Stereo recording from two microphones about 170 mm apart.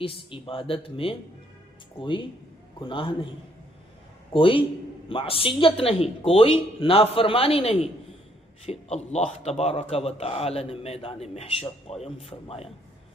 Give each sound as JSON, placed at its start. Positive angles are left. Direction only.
{"t": 0.0, "sound": "a man's voice", "side_deg": 30}
{"t": 4.3, "sound": "a man's voice", "side_deg": 30}